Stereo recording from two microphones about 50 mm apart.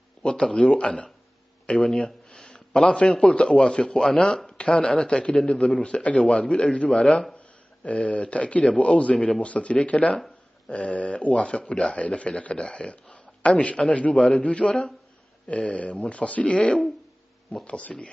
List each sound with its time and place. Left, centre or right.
0.2 s a man's voice: centre